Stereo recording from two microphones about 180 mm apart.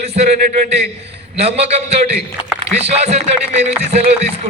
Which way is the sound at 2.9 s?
35° right (ahead or behind).